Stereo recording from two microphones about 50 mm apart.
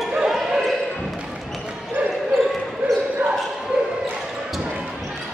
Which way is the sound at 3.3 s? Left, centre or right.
Centre.